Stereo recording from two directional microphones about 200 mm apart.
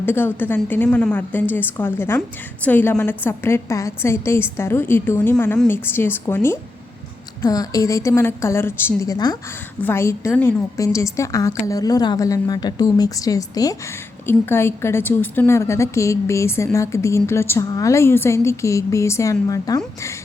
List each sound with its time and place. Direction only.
0.0 s a woman's voice: 10° left (ahead or behind)